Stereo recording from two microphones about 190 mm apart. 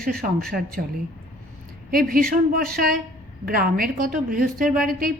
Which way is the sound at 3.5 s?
50° right (ahead or behind).